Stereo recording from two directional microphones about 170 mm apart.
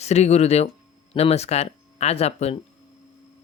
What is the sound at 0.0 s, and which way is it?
Speech, 40° left (ahead or behind).